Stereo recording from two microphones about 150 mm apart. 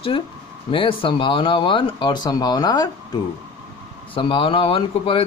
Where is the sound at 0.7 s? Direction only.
35° left (ahead or behind).